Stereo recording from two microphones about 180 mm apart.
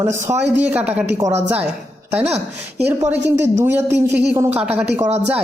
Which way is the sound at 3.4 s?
15° right (ahead or behind).